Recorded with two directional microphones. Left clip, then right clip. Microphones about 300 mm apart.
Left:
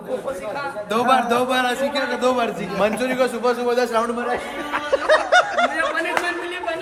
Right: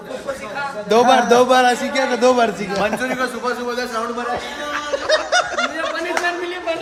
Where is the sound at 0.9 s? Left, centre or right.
Centre.